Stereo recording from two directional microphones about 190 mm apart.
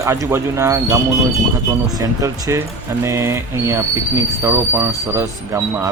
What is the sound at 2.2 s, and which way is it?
Speech, 15° right (ahead or behind).